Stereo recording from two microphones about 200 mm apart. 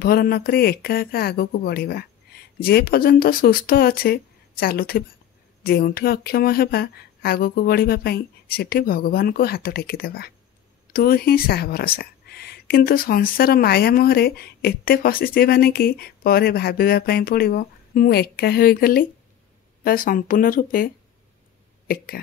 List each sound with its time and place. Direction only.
0.0 s speech: 50° left (ahead or behind)